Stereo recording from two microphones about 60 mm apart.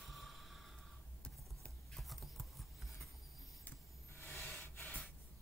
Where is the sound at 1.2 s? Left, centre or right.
Centre.